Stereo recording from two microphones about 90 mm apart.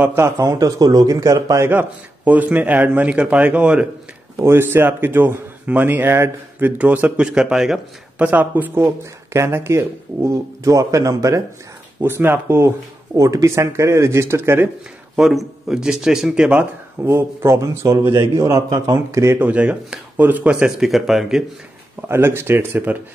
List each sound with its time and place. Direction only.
0.0 s speech: 25° right (ahead or behind)
0.4 s speech: 40° right (ahead or behind)
1.7 s speech: 20° right (ahead or behind)
4.5 s speech: 25° right (ahead or behind); by 8.3 s 5° right (ahead or behind)
8.3 s speech: 20° right (ahead or behind); by 11.4 s 40° right (ahead or behind)
12.0 s speech: 25° right (ahead or behind)
15.1 s speech: 5° right (ahead or behind)
17.0 s speech: 30° right (ahead or behind)
19.3 s speech: 15° right (ahead or behind)
22.0 s speech: 25° right (ahead or behind)